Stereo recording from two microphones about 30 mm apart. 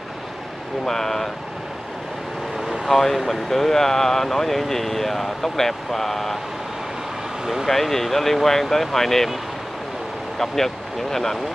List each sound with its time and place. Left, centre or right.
0.8 s speech: centre
2.9 s speech: centre
7.6 s speech: centre
10.4 s speech: centre